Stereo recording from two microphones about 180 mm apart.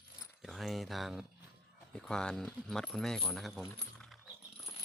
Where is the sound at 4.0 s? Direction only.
Centre (ahead or behind).